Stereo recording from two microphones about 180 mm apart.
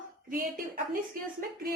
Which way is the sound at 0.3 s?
55° right (ahead or behind).